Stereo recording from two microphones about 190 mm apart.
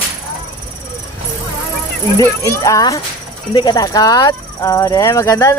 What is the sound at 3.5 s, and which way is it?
Speech, 20° left (ahead or behind).